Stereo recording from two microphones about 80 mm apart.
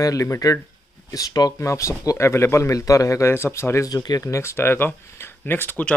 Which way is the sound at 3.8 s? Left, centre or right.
Left.